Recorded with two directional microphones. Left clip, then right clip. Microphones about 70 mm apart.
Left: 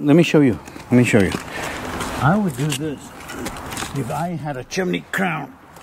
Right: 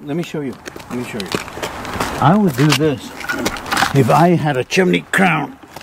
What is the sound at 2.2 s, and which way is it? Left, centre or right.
Speech, centre.